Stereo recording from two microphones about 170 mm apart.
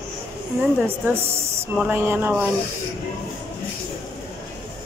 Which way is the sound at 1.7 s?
10° right (ahead or behind).